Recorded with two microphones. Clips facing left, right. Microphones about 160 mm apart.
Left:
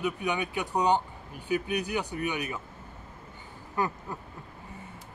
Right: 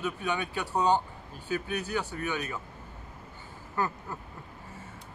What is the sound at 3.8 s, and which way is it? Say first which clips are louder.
Speech: left 1 dB; 15° left (ahead or behind).